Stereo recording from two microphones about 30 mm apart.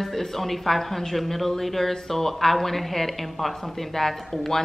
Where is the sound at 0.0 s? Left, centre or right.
Centre.